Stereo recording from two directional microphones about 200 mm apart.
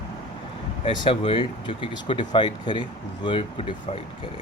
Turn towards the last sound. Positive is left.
turn(degrees=25)  # may be behind; listen again after turning